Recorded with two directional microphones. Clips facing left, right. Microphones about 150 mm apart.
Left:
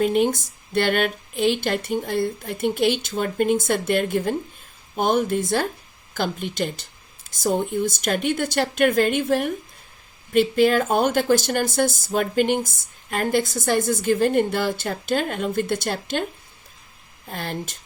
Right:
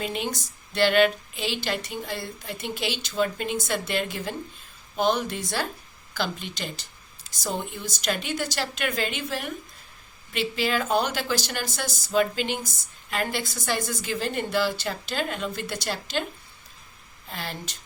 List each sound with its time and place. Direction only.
0.0 s speech: 50° left (ahead or behind)
17.2 s speech: 50° left (ahead or behind)